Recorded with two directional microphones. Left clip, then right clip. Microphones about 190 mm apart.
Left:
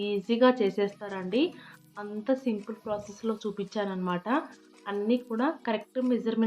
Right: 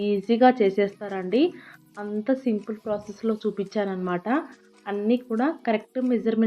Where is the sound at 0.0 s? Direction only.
15° right (ahead or behind).